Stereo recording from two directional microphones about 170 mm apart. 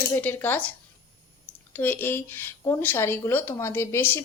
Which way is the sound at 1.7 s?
10° left (ahead or behind).